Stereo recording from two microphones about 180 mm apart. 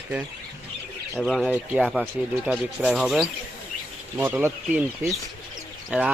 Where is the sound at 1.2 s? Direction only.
Centre (ahead or behind).